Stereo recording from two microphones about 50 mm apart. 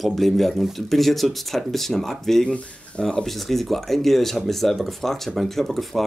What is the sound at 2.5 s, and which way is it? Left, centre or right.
Speech, left.